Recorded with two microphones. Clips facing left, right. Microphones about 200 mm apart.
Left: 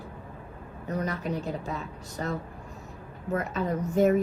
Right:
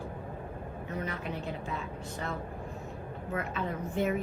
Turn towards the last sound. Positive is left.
turn(degrees=40)  # may be behind; listen again after turning